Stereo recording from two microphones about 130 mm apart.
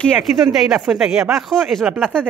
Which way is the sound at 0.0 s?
Centre (ahead or behind).